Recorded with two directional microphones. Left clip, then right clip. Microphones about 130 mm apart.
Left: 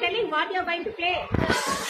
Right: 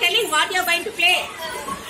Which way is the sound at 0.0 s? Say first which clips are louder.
Right 6 dB; 15° right (ahead or behind).